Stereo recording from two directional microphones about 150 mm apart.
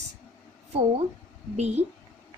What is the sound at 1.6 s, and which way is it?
Speech, 45° right (ahead or behind).